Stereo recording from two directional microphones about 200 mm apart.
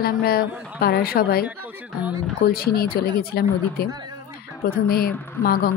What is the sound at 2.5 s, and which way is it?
A woman's voice, 50° left (ahead or behind).